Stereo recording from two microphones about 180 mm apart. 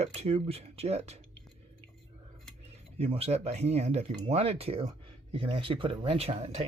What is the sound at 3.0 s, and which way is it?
Speech, 35° right (ahead or behind).